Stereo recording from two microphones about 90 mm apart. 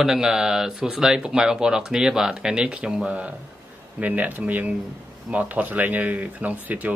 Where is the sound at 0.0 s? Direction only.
5° right (ahead or behind).